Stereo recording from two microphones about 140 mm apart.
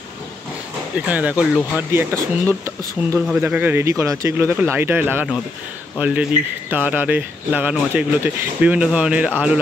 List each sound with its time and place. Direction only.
1.0 s speech: 10° right (ahead or behind)
1.8 s speech: 15° right (ahead or behind)